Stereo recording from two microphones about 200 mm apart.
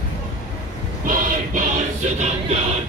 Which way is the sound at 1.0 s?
40° right (ahead or behind).